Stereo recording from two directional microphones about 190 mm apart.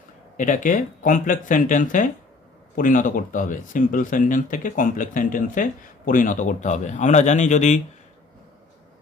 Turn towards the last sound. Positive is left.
turn(degrees=40)  # may be behind; listen again after turning